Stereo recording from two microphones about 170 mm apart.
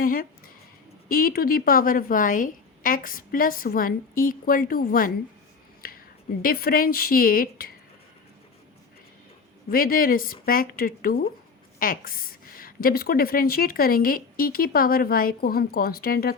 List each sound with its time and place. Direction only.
0.0 s a sound: 55° left (ahead or behind)
1.0 s a woman's voice: 60° left (ahead or behind)
6.4 s a woman's voice: 60° left (ahead or behind)
9.6 s a woman's voice: 60° left (ahead or behind)